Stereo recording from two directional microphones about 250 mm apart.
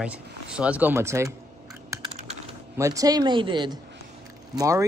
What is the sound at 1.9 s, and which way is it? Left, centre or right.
Typing, centre.